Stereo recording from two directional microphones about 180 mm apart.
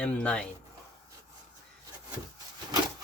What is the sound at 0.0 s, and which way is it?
Speech, 5° left (ahead or behind).